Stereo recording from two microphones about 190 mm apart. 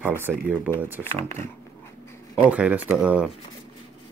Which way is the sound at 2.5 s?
5° right (ahead or behind).